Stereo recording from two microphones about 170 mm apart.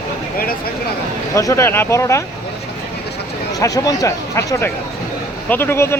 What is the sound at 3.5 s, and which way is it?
Speech, 20° left (ahead or behind).